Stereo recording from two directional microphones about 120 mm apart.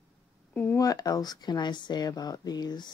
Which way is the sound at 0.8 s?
30° left (ahead or behind).